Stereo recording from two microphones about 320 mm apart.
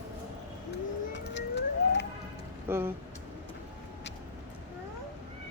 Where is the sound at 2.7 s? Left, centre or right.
Centre.